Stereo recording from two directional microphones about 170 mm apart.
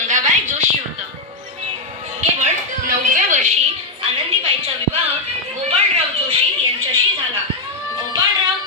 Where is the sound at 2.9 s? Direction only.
45° right (ahead or behind).